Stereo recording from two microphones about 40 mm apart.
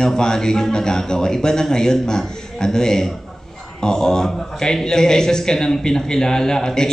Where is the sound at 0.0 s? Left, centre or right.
Centre.